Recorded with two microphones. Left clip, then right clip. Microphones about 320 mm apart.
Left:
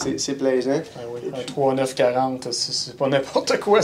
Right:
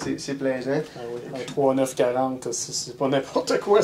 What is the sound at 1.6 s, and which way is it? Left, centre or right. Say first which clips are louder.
Speech: left 2 dB; left.